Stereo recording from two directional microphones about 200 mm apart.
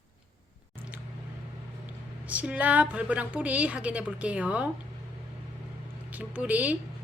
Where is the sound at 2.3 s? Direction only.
5° right (ahead or behind).